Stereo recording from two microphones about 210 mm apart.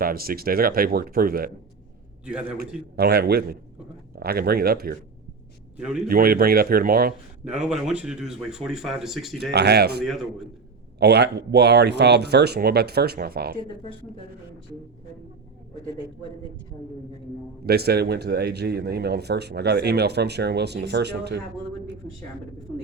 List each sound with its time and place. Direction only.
0.0 s speech: 45° right (ahead or behind)
2.2 s speech: 5° right (ahead or behind)
2.6 s speech: 50° right (ahead or behind)
6.1 s speech: 45° right (ahead or behind)
7.7 s speech: 5° right (ahead or behind)
9.5 s speech: 50° right (ahead or behind)
10.0 s speech: centre (ahead or behind)
11.0 s speech: 55° right (ahead or behind)
17.7 s speech: 50° right (ahead or behind)